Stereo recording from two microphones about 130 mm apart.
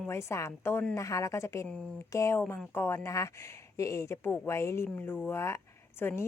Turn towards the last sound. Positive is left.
turn(degrees=15)  # may be behind; listen again after turning